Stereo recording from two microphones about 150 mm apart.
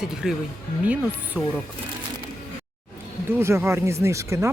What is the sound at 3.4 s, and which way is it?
Speech, 20° right (ahead or behind).